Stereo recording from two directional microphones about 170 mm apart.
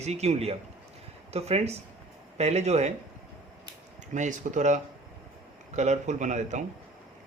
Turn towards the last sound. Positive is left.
turn(degrees=-45)  # may be behind; listen again after turning